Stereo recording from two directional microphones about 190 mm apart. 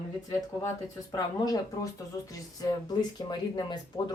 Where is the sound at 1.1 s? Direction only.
20° left (ahead or behind).